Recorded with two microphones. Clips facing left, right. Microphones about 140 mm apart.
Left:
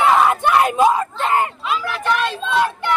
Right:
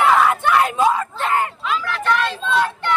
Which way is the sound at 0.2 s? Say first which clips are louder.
Left 1 dB; 25° left (ahead or behind).